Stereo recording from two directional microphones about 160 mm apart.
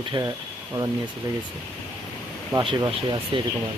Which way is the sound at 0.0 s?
25° right (ahead or behind).